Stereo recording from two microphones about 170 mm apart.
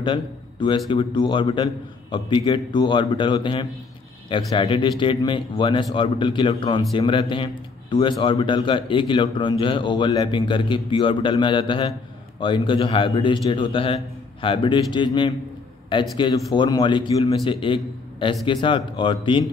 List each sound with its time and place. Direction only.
0.0 s a man's voice: 30° left (ahead or behind)